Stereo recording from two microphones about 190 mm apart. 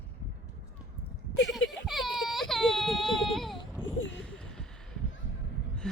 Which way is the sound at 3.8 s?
90° left.